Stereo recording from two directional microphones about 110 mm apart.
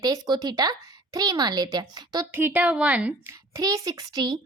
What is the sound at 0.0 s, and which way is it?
A child's voice, 35° right (ahead or behind).